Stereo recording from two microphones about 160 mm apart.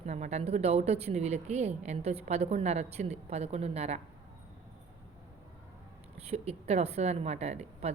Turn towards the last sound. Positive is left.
turn(degrees=-45)  # may be behind; listen again after turning